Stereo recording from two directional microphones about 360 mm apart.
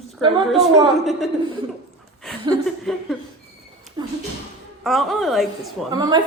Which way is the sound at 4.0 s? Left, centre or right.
Centre.